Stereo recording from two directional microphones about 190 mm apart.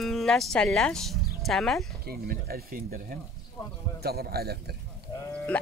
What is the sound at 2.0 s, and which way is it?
Speech, 50° right (ahead or behind).